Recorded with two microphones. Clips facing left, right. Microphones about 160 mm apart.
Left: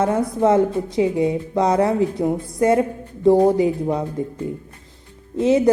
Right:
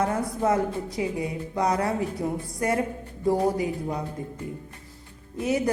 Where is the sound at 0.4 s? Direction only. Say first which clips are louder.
Left 8 dB; 25° left (ahead or behind).